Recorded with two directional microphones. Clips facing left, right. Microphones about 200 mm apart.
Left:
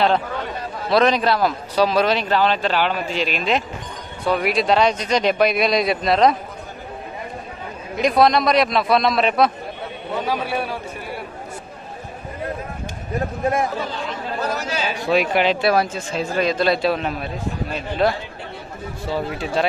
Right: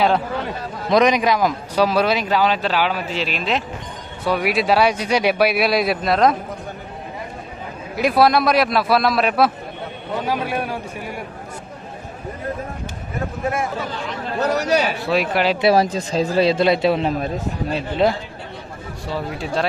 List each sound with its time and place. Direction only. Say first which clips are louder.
0.8 s a man's voice: right 1 dB; 15° right (ahead or behind)
7.9 s a man's voice: even; 5° right (ahead or behind)
14.5 s a man's voice: right 7 dB; 70° right (ahead or behind)
15.0 s speech: left 6 dB; centre (ahead or behind)
15.6 s a man's voice: right 3 dB; 35° right (ahead or behind)
19.0 s speech: left 1 dB; centre (ahead or behind)